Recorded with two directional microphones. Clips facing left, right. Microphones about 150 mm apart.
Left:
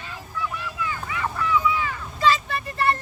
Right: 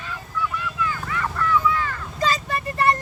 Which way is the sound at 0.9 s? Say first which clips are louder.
Right 1 dB; 10° left (ahead or behind).